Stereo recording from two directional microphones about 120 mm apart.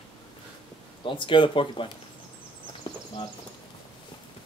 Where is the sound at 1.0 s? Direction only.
45° left (ahead or behind).